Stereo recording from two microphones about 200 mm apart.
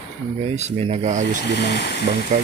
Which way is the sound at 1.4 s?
55° left (ahead or behind).